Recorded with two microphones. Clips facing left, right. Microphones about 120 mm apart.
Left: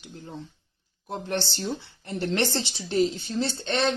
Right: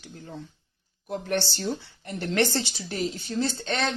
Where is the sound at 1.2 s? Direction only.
25° left (ahead or behind).